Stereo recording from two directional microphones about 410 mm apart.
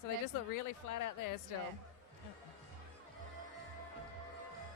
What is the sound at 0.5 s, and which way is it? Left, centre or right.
Speech, left.